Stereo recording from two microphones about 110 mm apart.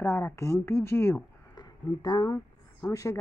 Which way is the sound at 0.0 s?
25° left (ahead or behind).